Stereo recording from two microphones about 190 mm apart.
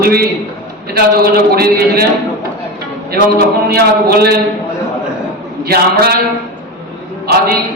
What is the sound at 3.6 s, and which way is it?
Speech, 55° right (ahead or behind).